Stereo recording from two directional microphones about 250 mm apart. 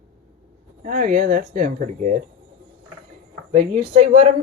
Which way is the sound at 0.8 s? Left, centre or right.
Right.